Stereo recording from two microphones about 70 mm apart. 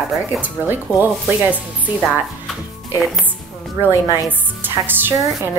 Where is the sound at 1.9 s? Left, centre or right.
Right.